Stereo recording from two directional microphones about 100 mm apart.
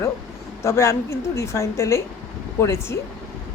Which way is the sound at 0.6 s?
30° left (ahead or behind).